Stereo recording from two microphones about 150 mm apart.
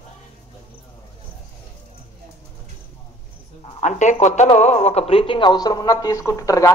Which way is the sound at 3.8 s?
50° left (ahead or behind).